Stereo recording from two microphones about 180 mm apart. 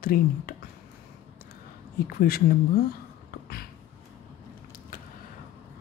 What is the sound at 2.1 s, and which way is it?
Speech, 55° left (ahead or behind).